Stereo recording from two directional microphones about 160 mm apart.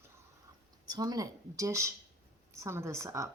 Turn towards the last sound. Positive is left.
turn(degrees=-20)  # may be behind; listen again after turning